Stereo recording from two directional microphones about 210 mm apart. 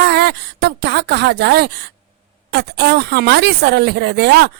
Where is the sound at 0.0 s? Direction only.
50° right (ahead or behind).